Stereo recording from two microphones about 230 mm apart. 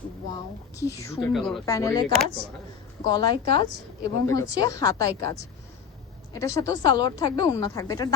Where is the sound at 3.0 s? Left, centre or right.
Centre.